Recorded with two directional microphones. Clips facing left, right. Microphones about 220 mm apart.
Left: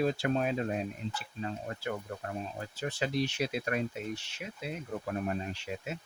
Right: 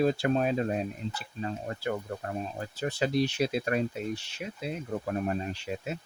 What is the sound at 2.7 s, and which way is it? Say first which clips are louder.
Speech: right 5 dB; 35° right (ahead or behind).